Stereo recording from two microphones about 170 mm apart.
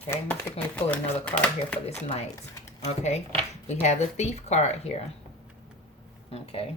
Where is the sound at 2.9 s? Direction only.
40° left (ahead or behind).